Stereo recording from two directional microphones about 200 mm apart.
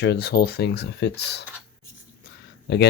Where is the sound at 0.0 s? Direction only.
55° left (ahead or behind).